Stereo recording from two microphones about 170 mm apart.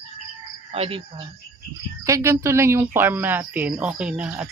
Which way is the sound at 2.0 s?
15° right (ahead or behind).